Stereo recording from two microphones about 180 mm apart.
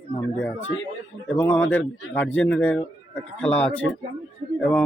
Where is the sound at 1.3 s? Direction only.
10° left (ahead or behind).